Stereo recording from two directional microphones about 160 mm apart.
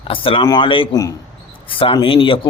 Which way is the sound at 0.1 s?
35° left (ahead or behind).